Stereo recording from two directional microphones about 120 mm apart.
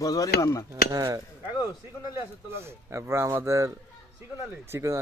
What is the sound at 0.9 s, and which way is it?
Cutlery, 30° right (ahead or behind).